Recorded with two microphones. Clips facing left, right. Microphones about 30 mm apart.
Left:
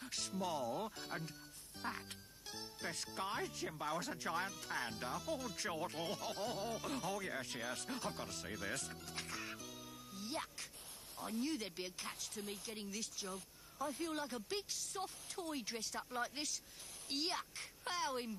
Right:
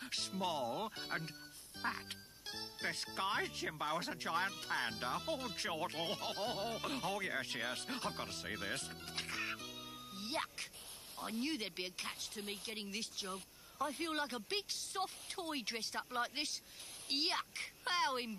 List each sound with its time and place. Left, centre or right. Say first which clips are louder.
0.0 s speech: right 2 dB; right
3.6 s speech: right 2 dB; right
7.5 s music: right 3 dB; right
11.1 s speech: right 1 dB; right